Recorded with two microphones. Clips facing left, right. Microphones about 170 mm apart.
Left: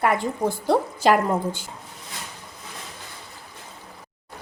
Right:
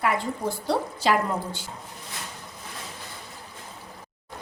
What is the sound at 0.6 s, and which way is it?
A woman's voice, 50° left (ahead or behind).